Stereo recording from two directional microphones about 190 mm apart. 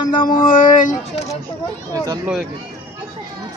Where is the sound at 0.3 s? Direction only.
45° left (ahead or behind).